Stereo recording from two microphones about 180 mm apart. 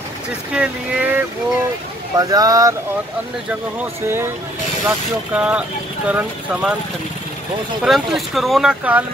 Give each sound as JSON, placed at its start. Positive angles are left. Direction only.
{"t": 0.5, "sound": "speech", "side_deg": -5}
{"t": 2.1, "sound": "speech", "side_deg": -20}
{"t": 4.0, "sound": "speech", "side_deg": -15}
{"t": 7.8, "sound": "speech", "side_deg": 0}